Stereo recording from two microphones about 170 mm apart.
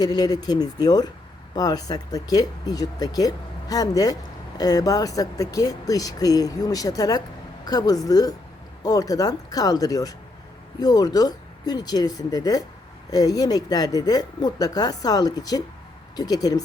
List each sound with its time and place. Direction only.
0.0 s speech: 20° left (ahead or behind)